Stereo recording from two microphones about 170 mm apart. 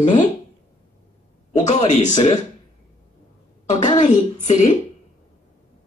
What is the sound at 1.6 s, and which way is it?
Speech, 45° left (ahead or behind).